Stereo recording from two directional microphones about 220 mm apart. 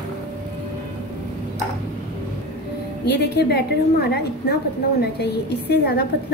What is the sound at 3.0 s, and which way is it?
A woman's voice, 50° left (ahead or behind).